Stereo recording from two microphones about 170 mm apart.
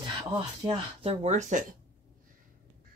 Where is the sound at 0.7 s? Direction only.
40° right (ahead or behind).